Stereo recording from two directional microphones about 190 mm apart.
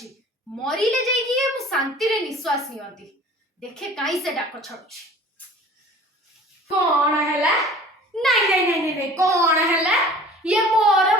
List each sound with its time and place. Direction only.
0.6 s a woman's voice: centre (ahead or behind)
3.6 s a woman's voice: 5° left (ahead or behind)
7.0 s a woman's voice: 15° right (ahead or behind)
7.3 s a child's voice: centre (ahead or behind)
9.0 s a woman's voice: 15° right (ahead or behind)
9.8 s a woman's voice: centre (ahead or behind)